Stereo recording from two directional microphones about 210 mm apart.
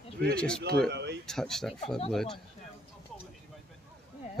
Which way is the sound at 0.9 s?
55° right (ahead or behind).